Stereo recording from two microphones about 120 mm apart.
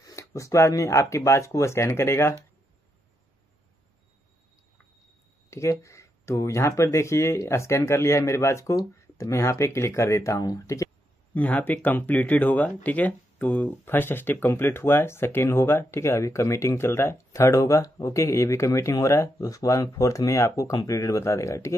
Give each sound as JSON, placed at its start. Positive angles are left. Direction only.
{"t": 0.0, "sound": "speech", "side_deg": 25}
{"t": 5.5, "sound": "speech", "side_deg": 25}
{"t": 11.3, "sound": "speech", "side_deg": 15}